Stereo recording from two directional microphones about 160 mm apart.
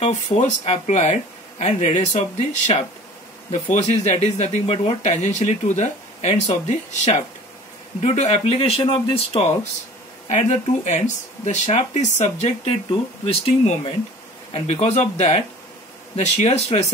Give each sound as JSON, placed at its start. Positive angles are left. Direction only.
{"t": 0.0, "sound": "speech", "side_deg": 45}
{"t": 8.0, "sound": "speech", "side_deg": 45}